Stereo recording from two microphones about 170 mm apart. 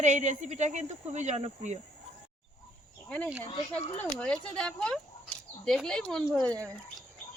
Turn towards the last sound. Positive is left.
turn(degrees=5)  # may be behind; listen again after turning